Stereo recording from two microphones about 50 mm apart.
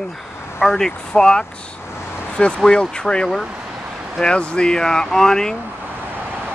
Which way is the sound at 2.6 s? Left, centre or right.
Centre.